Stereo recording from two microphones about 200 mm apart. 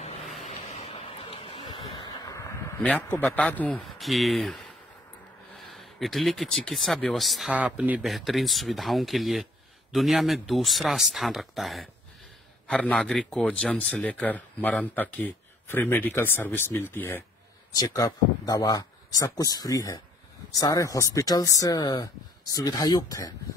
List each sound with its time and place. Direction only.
0.7 s vehicle: 30° left (ahead or behind)
2.8 s speech: 10° left (ahead or behind)
5.6 s speech: centre (ahead or behind); by 23.3 s 20° left (ahead or behind)